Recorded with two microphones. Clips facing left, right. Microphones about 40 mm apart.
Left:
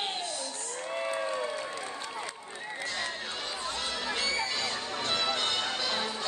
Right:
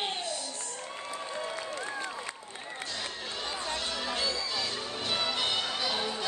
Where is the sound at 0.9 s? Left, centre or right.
Left.